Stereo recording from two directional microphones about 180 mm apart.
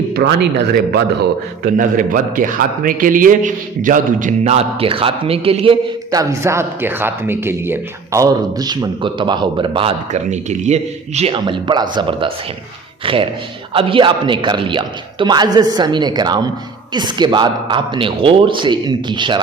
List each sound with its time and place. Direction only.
0.1 s speech: 60° right (ahead or behind)
1.6 s a man's voice: 45° right (ahead or behind); by 5.7 s 30° right (ahead or behind)
6.1 s speech: 20° right (ahead or behind)
10.1 s speech: 40° right (ahead or behind); by 19.4 s 25° right (ahead or behind)